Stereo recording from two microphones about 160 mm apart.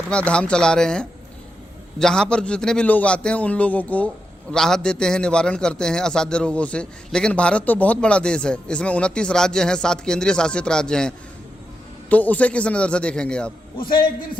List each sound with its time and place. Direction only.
0.1 s a man's voice: 5° left (ahead or behind)
13.7 s a man's voice: 30° left (ahead or behind)